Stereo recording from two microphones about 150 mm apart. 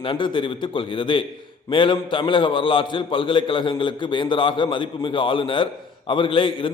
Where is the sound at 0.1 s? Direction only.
35° left (ahead or behind).